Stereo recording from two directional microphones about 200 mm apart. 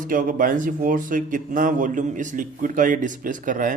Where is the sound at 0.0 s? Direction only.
45° right (ahead or behind).